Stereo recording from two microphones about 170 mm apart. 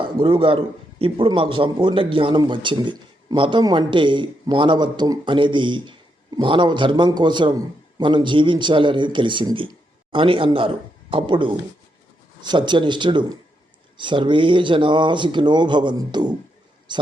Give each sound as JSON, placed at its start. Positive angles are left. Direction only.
{"t": 0.0, "sound": "a man's voice", "side_deg": -30}